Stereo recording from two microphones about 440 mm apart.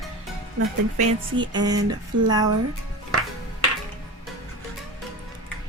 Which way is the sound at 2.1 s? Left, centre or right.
Right.